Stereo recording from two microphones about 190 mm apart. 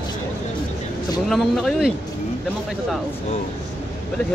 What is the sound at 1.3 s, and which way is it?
Speech, centre (ahead or behind).